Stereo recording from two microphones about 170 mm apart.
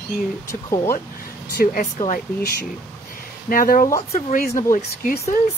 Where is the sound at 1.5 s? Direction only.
60° left (ahead or behind).